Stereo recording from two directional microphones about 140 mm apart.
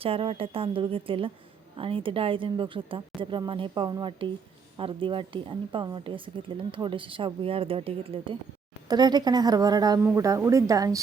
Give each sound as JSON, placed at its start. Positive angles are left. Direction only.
{"t": 0.0, "sound": "speech", "side_deg": -40}